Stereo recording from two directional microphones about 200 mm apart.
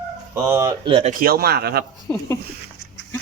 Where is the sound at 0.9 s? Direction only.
35° right (ahead or behind).